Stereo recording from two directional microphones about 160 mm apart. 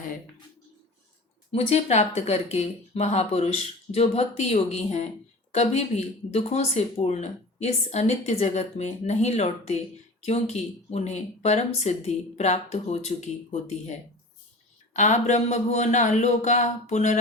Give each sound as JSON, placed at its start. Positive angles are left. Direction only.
{"t": 1.5, "sound": "speech", "side_deg": 45}